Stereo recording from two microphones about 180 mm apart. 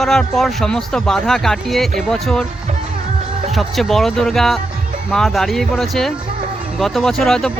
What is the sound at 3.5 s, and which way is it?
Speech, centre (ahead or behind).